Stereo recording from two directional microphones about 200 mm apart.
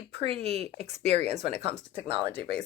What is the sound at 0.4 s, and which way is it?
Speech, 30° right (ahead or behind).